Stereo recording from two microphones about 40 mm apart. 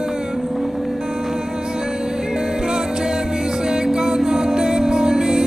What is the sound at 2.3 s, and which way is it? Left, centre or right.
Music, centre.